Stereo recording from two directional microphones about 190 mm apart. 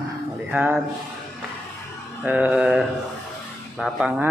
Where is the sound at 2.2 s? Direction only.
5° right (ahead or behind).